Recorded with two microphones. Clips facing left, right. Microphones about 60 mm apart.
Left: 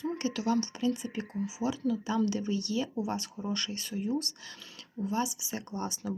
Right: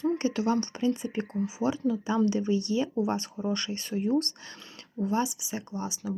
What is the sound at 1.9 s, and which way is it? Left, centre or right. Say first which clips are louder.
A woman's voice: right 2 dB; right.